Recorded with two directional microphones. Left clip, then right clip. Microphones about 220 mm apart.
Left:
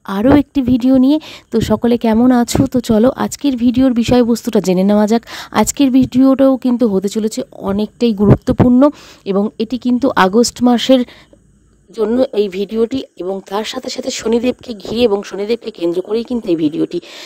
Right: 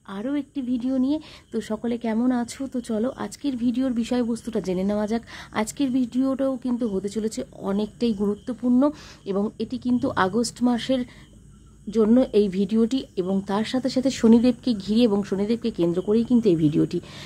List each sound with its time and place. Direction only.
0.0 s a woman's voice: 50° left (ahead or behind)